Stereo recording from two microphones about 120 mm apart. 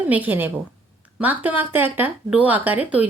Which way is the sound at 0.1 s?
15° right (ahead or behind).